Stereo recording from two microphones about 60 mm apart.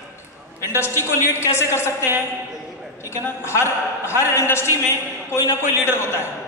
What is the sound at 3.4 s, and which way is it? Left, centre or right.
A man's voice, left.